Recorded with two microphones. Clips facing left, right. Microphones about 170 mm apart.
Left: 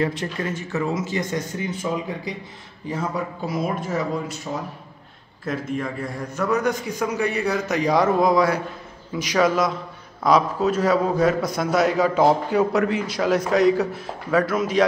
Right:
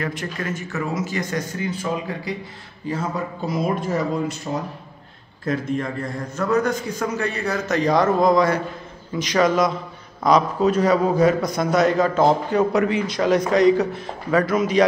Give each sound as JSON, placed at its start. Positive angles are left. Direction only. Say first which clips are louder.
{"t": 0.0, "sound": "speech", "louder": "left 3 dB", "side_deg": 30}
{"t": 3.4, "sound": "a man's voice", "louder": "right 4 dB", "side_deg": 5}
{"t": 5.4, "sound": "a man's voice", "louder": "right 3 dB", "side_deg": 5}